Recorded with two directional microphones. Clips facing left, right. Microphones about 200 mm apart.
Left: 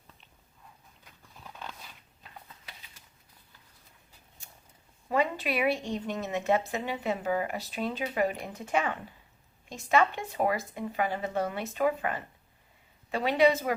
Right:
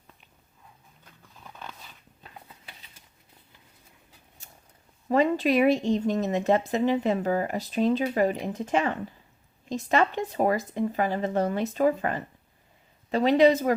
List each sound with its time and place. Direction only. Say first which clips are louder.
5.0 s a woman's voice: right 7 dB; 40° right (ahead or behind)